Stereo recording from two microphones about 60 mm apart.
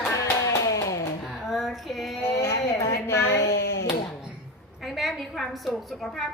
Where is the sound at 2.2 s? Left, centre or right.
Left.